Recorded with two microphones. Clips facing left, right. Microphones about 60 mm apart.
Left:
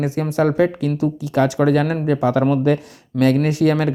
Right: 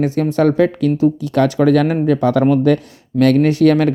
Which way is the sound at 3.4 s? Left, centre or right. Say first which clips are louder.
Right 5 dB; right.